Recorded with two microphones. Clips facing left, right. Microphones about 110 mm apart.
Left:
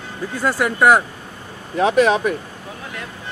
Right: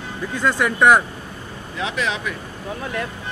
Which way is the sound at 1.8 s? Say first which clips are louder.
Left 10 dB; 45° left (ahead or behind).